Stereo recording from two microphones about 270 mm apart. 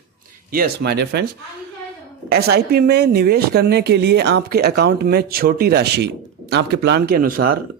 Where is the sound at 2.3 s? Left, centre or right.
Right.